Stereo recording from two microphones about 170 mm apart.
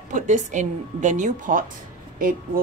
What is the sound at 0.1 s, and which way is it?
A woman's voice, 45° right (ahead or behind).